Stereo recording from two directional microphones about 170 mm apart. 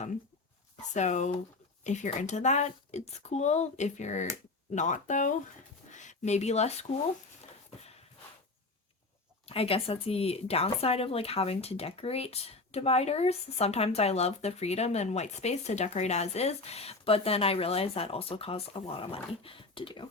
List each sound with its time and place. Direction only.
0.8 s speech: 45° left (ahead or behind)
9.5 s speech: 35° left (ahead or behind)